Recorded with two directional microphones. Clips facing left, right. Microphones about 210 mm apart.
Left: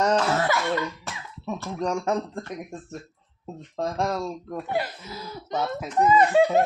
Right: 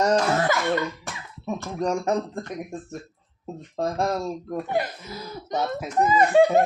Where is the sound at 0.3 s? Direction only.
35° right (ahead or behind).